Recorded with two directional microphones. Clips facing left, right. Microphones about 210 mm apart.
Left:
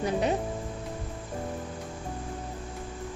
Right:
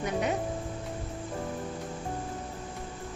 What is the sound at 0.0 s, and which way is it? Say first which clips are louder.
Speech: left 3 dB; 30° left (ahead or behind).